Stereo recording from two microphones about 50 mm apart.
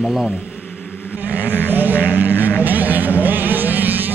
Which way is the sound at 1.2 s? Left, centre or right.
Right.